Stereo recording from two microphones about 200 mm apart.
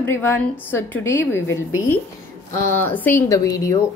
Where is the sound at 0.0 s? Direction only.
10° left (ahead or behind).